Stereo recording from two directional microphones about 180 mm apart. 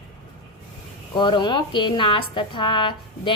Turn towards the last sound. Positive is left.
turn(degrees=30)  # may be behind; listen again after turning